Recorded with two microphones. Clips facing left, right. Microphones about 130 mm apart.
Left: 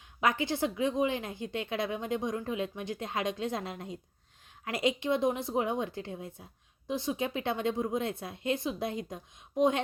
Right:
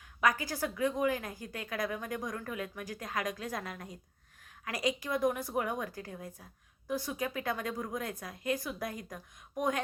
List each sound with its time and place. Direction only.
0.2 s a woman's voice: 25° left (ahead or behind)